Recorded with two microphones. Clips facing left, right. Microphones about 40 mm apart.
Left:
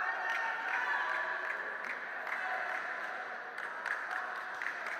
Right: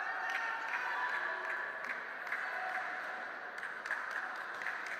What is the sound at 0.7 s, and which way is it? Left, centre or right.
Music, left.